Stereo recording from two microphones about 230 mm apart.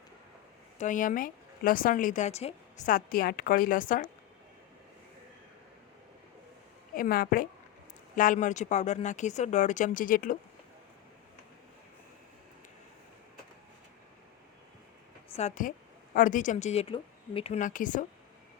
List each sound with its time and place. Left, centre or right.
0.8 s speech: left
6.9 s speech: left
15.3 s a woman's voice: left